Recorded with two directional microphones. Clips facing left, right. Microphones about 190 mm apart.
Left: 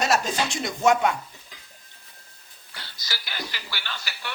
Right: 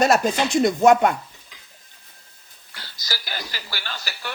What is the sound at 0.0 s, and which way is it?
Speech, 55° right (ahead or behind).